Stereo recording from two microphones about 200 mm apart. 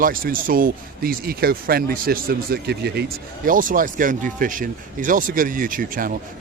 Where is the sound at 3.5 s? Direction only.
45° right (ahead or behind).